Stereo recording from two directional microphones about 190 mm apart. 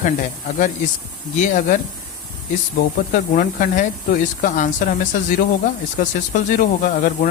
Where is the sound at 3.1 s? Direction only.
45° left (ahead or behind).